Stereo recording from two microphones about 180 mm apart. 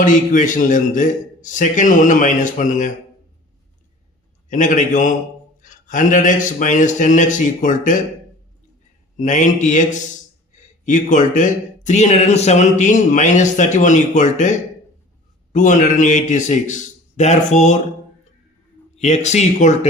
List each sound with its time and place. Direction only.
0.0 s speech: 45° left (ahead or behind)
4.4 s speech: 45° left (ahead or behind)
9.1 s speech: 45° left (ahead or behind)
18.9 s speech: 40° left (ahead or behind)